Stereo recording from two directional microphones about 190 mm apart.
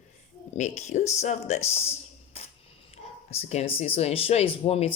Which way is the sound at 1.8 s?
30° left (ahead or behind).